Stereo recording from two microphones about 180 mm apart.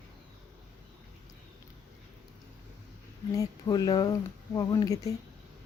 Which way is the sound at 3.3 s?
20° left (ahead or behind).